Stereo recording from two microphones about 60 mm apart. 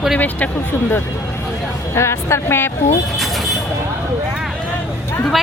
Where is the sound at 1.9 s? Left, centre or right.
Left.